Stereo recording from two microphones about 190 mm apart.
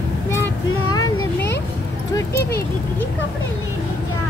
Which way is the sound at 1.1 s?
60° left (ahead or behind).